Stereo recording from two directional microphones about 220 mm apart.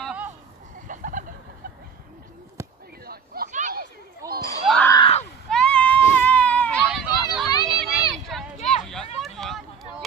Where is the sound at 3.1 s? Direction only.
40° right (ahead or behind).